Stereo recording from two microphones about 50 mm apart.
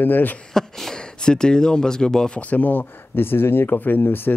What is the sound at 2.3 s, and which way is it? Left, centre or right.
Speech, left.